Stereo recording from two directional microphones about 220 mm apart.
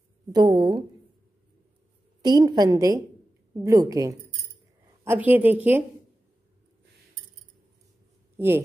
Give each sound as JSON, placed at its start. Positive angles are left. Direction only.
{"t": 0.3, "sound": "a woman's voice", "side_deg": -20}
{"t": 2.2, "sound": "speech", "side_deg": -20}